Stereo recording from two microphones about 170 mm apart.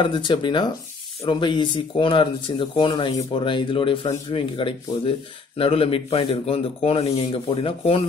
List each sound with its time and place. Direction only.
0.0 s a man's voice: 25° left (ahead or behind)